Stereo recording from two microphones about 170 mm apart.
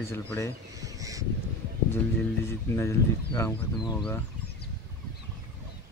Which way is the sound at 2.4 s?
15° left (ahead or behind).